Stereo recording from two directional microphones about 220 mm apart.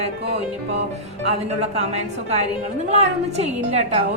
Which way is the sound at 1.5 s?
30° right (ahead or behind).